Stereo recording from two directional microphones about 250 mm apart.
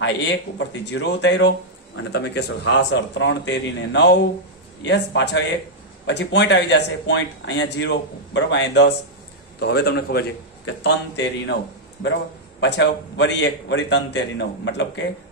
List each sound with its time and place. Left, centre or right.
0.0 s a man's voice: left
12.5 s speech: left